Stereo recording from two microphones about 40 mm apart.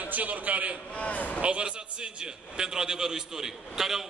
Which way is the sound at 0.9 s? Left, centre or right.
Left.